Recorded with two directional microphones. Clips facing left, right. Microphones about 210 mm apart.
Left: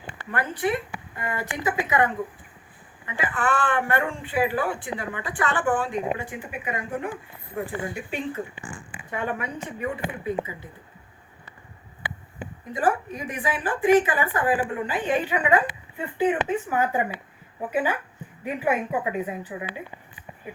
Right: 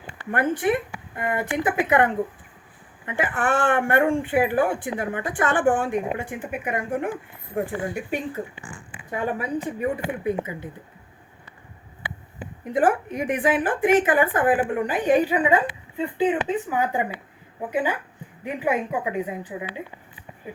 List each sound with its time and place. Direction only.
0.3 s speech: 50° right (ahead or behind)
3.1 s speech: 50° right (ahead or behind)
9.1 s speech: 35° right (ahead or behind)
13.1 s speech: 55° right (ahead or behind)
15.4 s a woman's voice: 20° right (ahead or behind)